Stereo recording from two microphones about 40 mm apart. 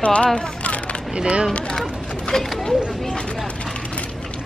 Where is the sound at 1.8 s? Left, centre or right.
Centre.